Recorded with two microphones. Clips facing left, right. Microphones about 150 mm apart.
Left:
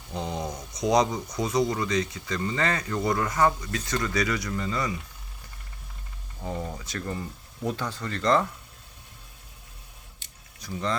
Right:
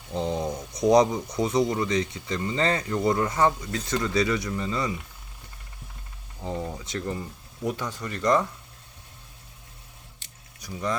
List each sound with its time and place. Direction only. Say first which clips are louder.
0.1 s speech: right 4 dB; 25° right (ahead or behind)
6.5 s speech: right 2 dB; centre (ahead or behind)
6.7 s speech: right 2 dB; 25° right (ahead or behind)
10.6 s speech: even; 15° right (ahead or behind)